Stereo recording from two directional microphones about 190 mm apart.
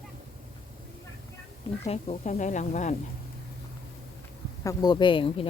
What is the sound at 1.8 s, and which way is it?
Speech, 35° left (ahead or behind).